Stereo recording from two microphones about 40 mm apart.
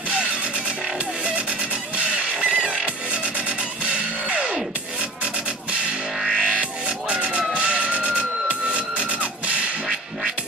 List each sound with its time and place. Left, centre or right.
2.4 s music: right
6.2 s music: centre; by 9.3 s right